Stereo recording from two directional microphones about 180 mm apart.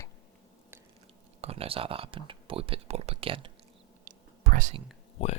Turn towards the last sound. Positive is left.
turn(degrees=35)  # may be behind; listen again after turning